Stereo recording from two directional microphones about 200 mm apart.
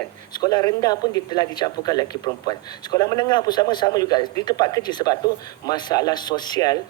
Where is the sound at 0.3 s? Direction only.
20° left (ahead or behind).